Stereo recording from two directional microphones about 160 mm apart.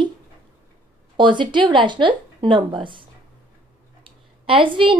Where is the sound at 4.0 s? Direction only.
30° right (ahead or behind).